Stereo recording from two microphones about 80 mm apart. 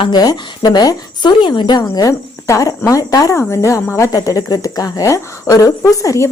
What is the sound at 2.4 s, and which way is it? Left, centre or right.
A woman's voice, left.